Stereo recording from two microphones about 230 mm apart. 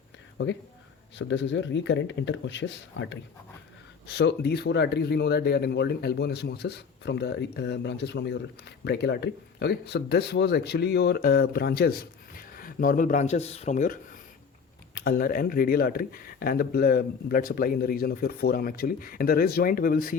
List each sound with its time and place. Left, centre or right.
0.4 s speech: left